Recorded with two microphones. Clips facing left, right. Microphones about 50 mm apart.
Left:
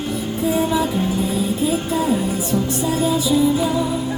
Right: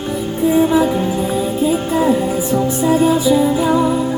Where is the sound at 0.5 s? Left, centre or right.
Right.